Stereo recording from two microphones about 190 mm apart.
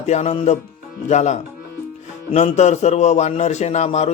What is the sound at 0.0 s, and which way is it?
A man's voice, 35° left (ahead or behind).